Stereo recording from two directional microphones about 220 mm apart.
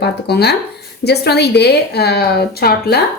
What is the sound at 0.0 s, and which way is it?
A woman's voice, 45° left (ahead or behind).